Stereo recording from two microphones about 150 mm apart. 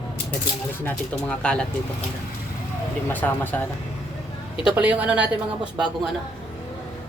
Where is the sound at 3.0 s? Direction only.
15° left (ahead or behind).